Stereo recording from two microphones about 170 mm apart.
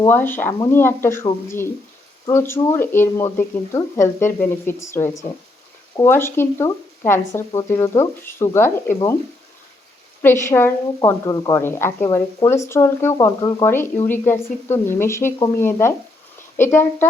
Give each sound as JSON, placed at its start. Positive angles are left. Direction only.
{"t": 0.1, "sound": "a woman's voice", "side_deg": 10}
{"t": 10.2, "sound": "a woman's voice", "side_deg": 15}